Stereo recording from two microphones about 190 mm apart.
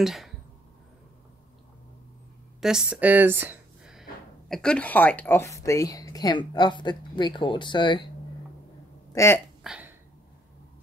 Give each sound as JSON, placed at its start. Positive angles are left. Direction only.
{"t": 0.0, "sound": "speech", "side_deg": 0}
{"t": 2.6, "sound": "speech", "side_deg": -5}
{"t": 4.5, "sound": "speech", "side_deg": 5}
{"t": 9.1, "sound": "speech", "side_deg": 15}
{"t": 9.6, "sound": "a sound", "side_deg": -5}